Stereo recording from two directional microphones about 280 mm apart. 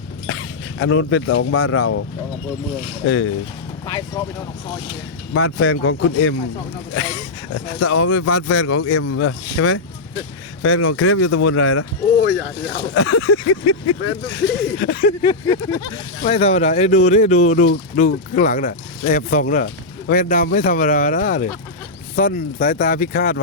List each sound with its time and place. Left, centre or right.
0.3 s speech: left
3.8 s speech: centre
5.3 s speech: left
14.7 s speech: left
15.2 s speech: centre; by 23.4 s left